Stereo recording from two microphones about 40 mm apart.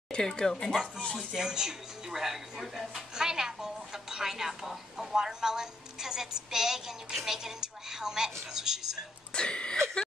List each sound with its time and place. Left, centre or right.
0.4 s speech: centre
1.1 s speech: centre
9.3 s cough: left